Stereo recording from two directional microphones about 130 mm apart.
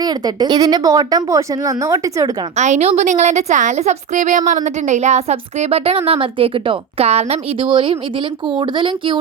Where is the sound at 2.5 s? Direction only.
60° right (ahead or behind).